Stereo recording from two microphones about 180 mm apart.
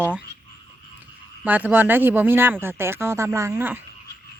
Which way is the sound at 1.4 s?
10° right (ahead or behind).